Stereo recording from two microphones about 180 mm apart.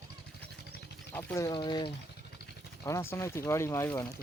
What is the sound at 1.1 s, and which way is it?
Speech, 10° left (ahead or behind).